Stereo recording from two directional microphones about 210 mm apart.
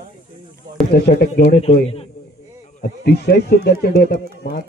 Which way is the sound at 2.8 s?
50° left (ahead or behind).